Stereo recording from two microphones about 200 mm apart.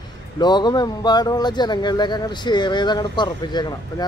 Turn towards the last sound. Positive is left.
turn(degrees=20)  # may be behind; listen again after turning